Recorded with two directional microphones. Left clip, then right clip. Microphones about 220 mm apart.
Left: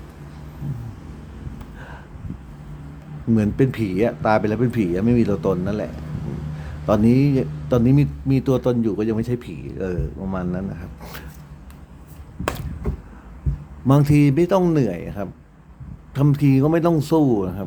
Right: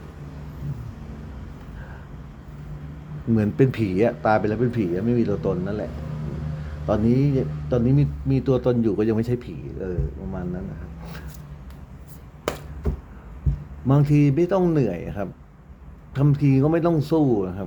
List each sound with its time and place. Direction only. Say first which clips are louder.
3.3 s speech: left 1 dB; centre (ahead or behind)
9.8 s a man's voice: left 4 dB; 20° left (ahead or behind)
13.8 s speech: left 3 dB; 10° left (ahead or behind)